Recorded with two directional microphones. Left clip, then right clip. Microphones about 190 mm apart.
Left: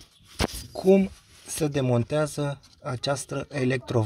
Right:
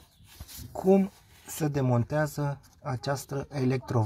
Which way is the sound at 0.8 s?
40° left (ahead or behind).